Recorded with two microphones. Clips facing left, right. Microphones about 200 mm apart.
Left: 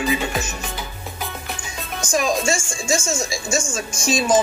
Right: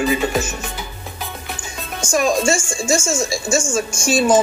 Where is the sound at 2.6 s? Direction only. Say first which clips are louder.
Right 3 dB; 30° right (ahead or behind).